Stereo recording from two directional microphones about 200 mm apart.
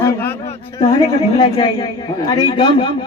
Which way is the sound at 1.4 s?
20° left (ahead or behind).